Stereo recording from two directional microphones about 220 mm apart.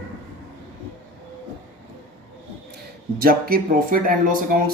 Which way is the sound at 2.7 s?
45° right (ahead or behind).